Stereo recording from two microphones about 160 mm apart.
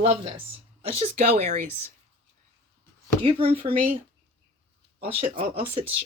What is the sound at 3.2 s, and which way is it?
Speech, 35° right (ahead or behind).